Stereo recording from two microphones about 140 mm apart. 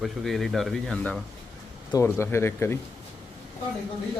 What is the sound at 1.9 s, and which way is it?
Speech, 20° left (ahead or behind).